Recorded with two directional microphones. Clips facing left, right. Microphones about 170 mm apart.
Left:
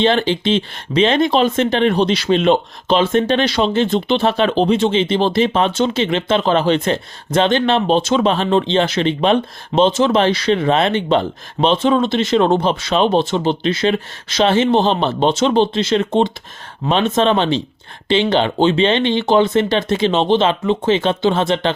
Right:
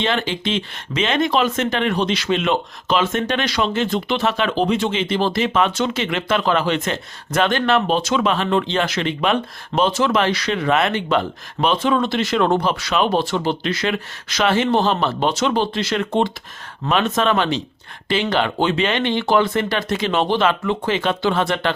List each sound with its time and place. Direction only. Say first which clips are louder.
0.0 s speech: left 6 dB; 30° left (ahead or behind)